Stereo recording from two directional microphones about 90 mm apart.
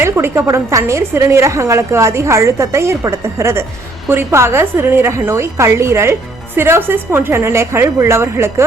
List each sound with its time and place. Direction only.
0.0 s a woman's voice: 25° right (ahead or behind)